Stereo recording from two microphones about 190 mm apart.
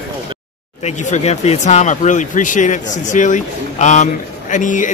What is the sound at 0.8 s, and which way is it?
Speech, 35° left (ahead or behind).